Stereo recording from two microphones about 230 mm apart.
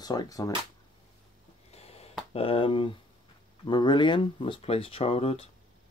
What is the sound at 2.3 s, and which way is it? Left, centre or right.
Speech, left.